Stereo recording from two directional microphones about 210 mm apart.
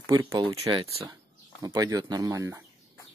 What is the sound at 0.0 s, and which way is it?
Speech, 15° right (ahead or behind).